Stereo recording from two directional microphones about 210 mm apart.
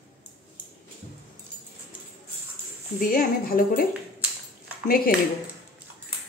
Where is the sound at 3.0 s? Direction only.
40° left (ahead or behind).